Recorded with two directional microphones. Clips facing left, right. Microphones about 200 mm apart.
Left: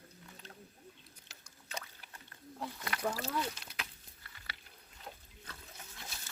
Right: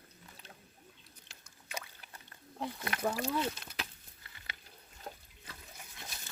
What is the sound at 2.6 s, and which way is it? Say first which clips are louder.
Wild animals: right 3 dB; 25° right (ahead or behind).